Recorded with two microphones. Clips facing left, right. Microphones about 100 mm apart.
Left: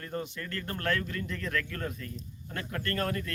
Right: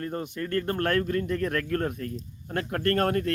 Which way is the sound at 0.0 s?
40° right (ahead or behind).